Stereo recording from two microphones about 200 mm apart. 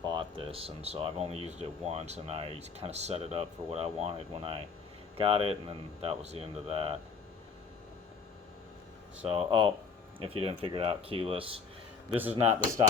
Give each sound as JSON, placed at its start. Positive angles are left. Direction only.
{"t": 0.0, "sound": "speech", "side_deg": -25}
{"t": 9.2, "sound": "speech", "side_deg": -30}